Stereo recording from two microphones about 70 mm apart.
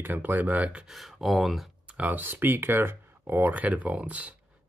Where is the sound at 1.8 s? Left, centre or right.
Centre.